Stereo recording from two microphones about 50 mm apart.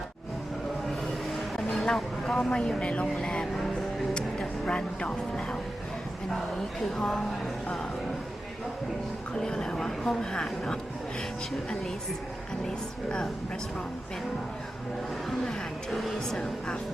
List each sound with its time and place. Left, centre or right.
1.7 s speech: centre
4.1 s music: centre
6.3 s a woman's voice: centre
9.3 s a woman's voice: centre
12.6 s a woman's voice: centre
15.3 s speech: centre